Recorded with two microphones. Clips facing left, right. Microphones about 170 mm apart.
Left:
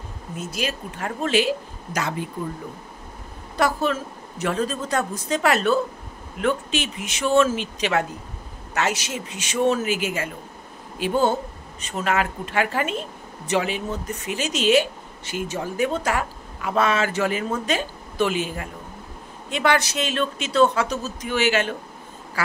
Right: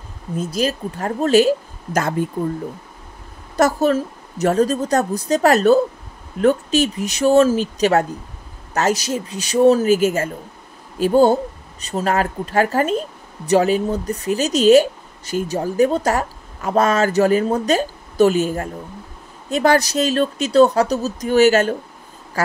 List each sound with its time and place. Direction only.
0.4 s a woman's voice: 35° right (ahead or behind)
3.5 s a woman's voice: 40° right (ahead or behind)